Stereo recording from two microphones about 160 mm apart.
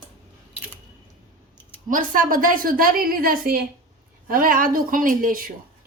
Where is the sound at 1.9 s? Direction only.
55° right (ahead or behind).